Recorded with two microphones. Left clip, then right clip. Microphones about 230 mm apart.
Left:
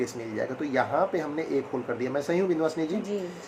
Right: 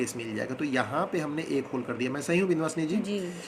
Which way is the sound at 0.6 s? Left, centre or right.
Right.